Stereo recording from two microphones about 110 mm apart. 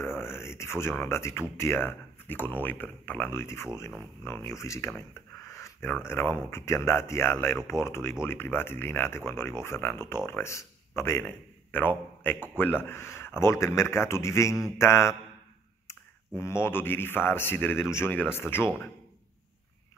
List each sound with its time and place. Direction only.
0.2 s a man's voice: 20° left (ahead or behind)